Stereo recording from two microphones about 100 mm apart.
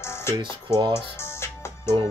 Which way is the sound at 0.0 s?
25° left (ahead or behind).